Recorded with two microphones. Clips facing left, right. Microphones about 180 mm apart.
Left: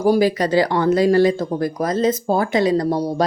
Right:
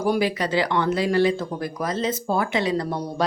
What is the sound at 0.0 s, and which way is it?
A woman's voice, 40° left (ahead or behind).